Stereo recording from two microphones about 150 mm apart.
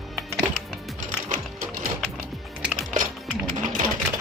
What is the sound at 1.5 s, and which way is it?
Music, 65° right (ahead or behind).